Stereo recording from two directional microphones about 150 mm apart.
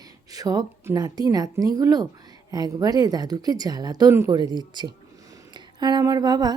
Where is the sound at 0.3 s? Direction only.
25° right (ahead or behind).